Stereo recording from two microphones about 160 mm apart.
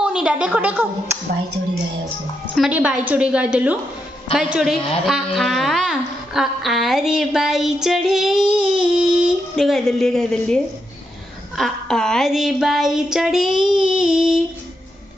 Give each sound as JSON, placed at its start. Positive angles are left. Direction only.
{"t": 0.0, "sound": "a woman's voice", "side_deg": -5}
{"t": 2.5, "sound": "a woman's voice", "side_deg": -5}
{"t": 8.5, "sound": "a sound", "side_deg": -30}
{"t": 8.9, "sound": "a woman's voice", "side_deg": -5}